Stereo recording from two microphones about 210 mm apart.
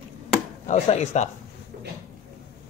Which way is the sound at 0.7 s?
30° left (ahead or behind).